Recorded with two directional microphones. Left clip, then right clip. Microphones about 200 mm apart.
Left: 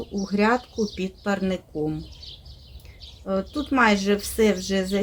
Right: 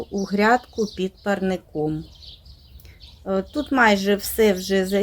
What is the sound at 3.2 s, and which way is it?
Speech, 20° right (ahead or behind).